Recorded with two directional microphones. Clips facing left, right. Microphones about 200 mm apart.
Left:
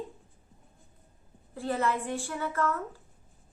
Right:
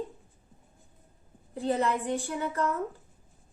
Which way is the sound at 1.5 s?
20° right (ahead or behind).